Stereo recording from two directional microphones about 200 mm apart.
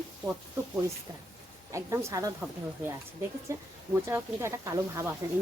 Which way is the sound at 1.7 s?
15° right (ahead or behind).